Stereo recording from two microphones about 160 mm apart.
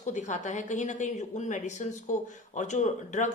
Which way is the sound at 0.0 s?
50° left (ahead or behind).